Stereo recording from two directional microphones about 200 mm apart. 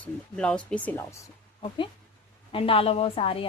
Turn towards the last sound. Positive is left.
turn(degrees=30)  # may be behind; listen again after turning